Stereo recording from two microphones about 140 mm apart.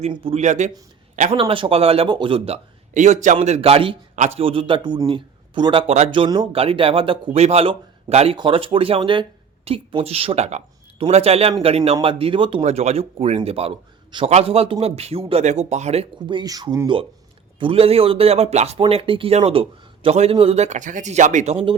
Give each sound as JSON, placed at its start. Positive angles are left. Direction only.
{"t": 0.1, "sound": "speech", "side_deg": -40}
{"t": 0.4, "sound": "a man's voice", "side_deg": -60}
{"t": 1.3, "sound": "speech", "side_deg": -40}
{"t": 2.9, "sound": "a man's voice", "side_deg": -60}
{"t": 3.3, "sound": "speech", "side_deg": -45}
{"t": 4.1, "sound": "a man's voice", "side_deg": -55}
{"t": 12.6, "sound": "speech", "side_deg": -50}
{"t": 16.2, "sound": "speech", "side_deg": -30}